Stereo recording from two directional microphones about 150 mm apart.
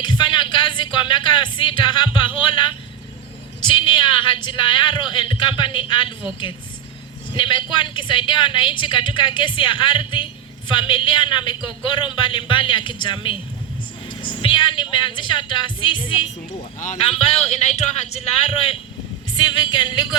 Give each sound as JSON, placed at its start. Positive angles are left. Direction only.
{"t": 0.0, "sound": "a sound", "side_deg": 30}
{"t": 3.6, "sound": "a woman's voice", "side_deg": 30}
{"t": 7.3, "sound": "a woman's voice", "side_deg": 30}
{"t": 19.4, "sound": "speech", "side_deg": 30}